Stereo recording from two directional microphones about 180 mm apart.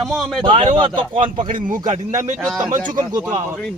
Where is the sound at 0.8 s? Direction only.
30° right (ahead or behind).